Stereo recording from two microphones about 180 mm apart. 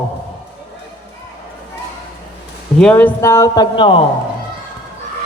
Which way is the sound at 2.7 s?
5° left (ahead or behind).